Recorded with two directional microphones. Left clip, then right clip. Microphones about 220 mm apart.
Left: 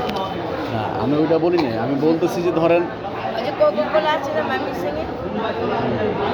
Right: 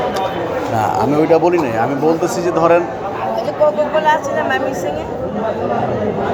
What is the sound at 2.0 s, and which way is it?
Speech, 25° left (ahead or behind).